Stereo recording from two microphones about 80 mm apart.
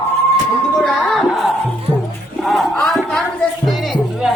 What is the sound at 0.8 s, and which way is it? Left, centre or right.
Music, centre.